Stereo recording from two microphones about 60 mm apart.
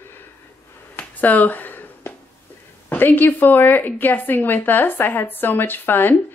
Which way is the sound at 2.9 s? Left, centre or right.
Left.